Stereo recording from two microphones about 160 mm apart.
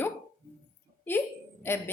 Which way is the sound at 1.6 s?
15° left (ahead or behind).